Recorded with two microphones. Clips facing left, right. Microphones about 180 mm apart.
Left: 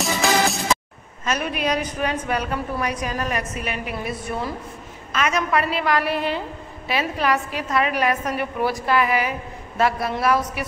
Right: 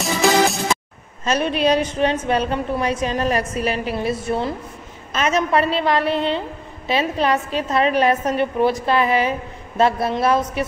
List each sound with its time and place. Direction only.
0.0 s music: centre (ahead or behind)
1.2 s a woman's voice: 30° right (ahead or behind)